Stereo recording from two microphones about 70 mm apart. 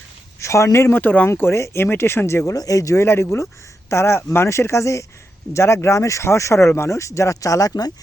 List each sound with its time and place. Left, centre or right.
0.3 s speech: left
1.3 s speech: left
2.6 s speech: left